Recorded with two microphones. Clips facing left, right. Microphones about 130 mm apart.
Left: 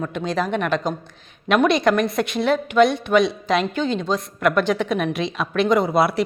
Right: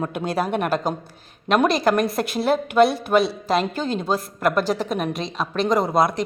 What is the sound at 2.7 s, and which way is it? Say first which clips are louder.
Speech: even; 30° right (ahead or behind).